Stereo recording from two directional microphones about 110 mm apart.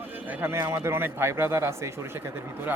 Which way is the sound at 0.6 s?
25° right (ahead or behind).